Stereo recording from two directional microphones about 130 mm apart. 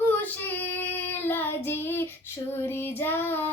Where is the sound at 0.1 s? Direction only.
15° left (ahead or behind).